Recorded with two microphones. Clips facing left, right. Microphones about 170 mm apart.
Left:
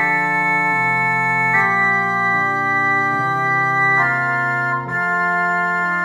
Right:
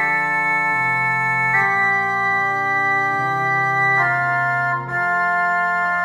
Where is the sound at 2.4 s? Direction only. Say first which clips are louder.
Left 1 dB; 35° right (ahead or behind).